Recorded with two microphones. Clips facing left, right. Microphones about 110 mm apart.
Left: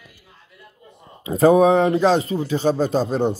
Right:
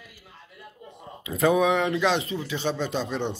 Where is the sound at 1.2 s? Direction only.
35° left (ahead or behind).